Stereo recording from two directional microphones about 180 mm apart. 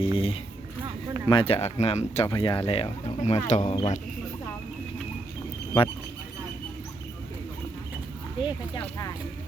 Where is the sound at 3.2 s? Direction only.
40° left (ahead or behind).